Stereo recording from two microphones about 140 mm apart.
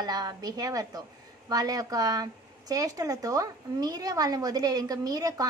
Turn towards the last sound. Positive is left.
turn(degrees=-25)  # may be behind; listen again after turning